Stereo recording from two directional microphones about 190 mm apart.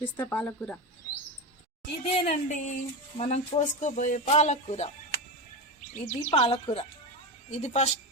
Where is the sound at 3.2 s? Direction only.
40° left (ahead or behind).